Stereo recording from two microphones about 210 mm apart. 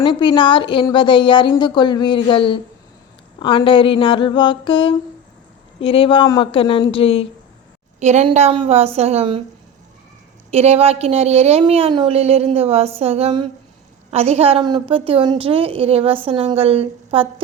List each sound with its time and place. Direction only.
0.0 s a woman's voice: 20° left (ahead or behind)
7.9 s a woman's voice: 35° right (ahead or behind)
10.5 s a woman's voice: 30° right (ahead or behind)